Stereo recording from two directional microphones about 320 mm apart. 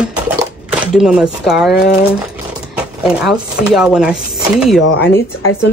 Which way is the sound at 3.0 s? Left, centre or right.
Centre.